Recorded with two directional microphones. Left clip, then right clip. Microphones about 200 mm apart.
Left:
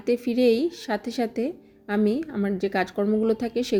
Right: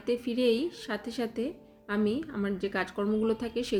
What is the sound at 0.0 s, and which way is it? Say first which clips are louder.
Speech: left 6 dB; 25° left (ahead or behind).